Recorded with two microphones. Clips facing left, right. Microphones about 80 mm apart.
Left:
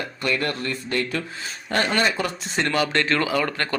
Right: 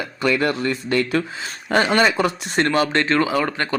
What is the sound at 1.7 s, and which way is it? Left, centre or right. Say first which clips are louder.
Speech: right 5 dB; centre.